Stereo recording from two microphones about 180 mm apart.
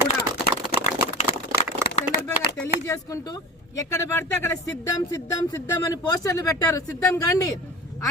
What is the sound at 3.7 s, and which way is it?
Speech, 15° left (ahead or behind).